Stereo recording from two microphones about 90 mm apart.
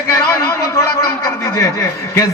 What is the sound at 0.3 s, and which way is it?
A man's voice, 35° left (ahead or behind).